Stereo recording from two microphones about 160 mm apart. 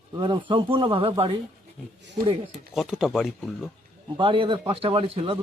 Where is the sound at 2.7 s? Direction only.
Centre (ahead or behind).